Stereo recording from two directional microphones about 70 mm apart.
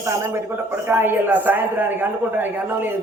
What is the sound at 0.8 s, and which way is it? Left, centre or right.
Speech, right.